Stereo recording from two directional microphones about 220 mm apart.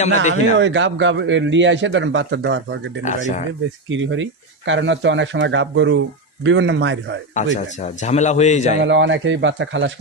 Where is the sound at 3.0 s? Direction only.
35° left (ahead or behind).